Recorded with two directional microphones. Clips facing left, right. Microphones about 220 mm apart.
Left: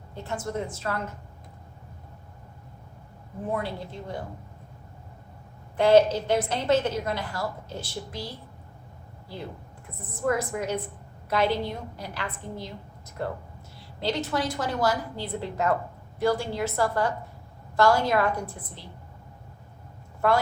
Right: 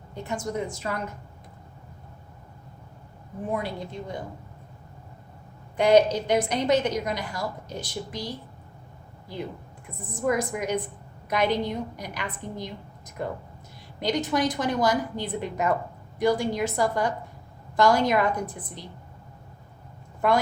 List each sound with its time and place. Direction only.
0.1 s a woman's voice: 15° right (ahead or behind)
3.5 s a woman's voice: 15° right (ahead or behind)
5.7 s a woman's voice: 15° right (ahead or behind)
10.2 s a woman's voice: 15° right (ahead or behind)
14.0 s a woman's voice: 15° right (ahead or behind)